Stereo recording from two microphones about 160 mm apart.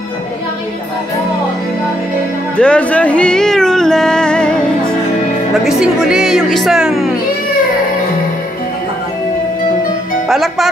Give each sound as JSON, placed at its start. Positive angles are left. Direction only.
{"t": 2.5, "sound": "music", "side_deg": 5}
{"t": 5.7, "sound": "speech", "side_deg": -5}
{"t": 10.2, "sound": "speech", "side_deg": 0}